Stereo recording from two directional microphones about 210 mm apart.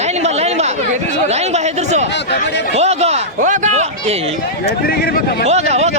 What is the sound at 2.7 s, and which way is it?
Speech, 30° right (ahead or behind).